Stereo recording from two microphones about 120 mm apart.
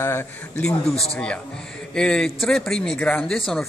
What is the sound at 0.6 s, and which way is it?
Speech, 5° left (ahead or behind).